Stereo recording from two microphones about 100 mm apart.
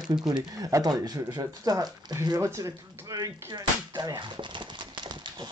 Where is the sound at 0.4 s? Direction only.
35° right (ahead or behind).